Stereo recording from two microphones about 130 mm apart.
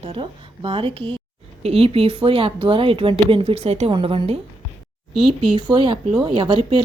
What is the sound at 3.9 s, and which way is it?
Speech, 45° right (ahead or behind).